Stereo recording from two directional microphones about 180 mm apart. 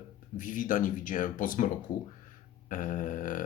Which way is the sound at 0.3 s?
45° left (ahead or behind).